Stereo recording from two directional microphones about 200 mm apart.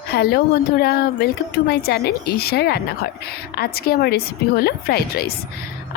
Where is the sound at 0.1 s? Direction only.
50° left (ahead or behind).